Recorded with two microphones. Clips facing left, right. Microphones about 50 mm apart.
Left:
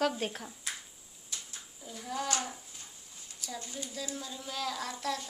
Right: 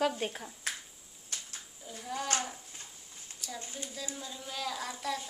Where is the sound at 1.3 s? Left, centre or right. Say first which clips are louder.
Right 1 dB; right.